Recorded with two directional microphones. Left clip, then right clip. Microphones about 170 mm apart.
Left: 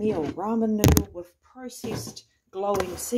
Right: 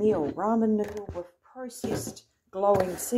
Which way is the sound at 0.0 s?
Centre (ahead or behind).